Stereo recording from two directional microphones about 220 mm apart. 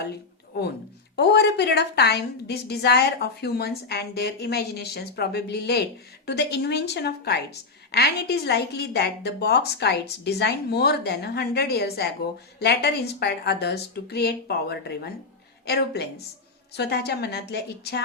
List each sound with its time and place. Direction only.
1.1 s a woman's voice: 50° left (ahead or behind)